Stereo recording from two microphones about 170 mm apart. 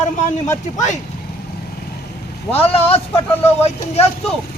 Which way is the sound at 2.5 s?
35° left (ahead or behind).